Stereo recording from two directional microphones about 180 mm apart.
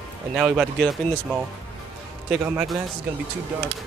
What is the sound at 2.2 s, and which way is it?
Speech, 5° right (ahead or behind).